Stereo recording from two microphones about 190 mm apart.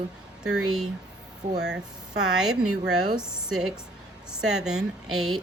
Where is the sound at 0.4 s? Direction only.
5° right (ahead or behind).